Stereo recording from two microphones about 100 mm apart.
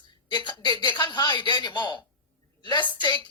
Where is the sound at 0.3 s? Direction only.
50° left (ahead or behind).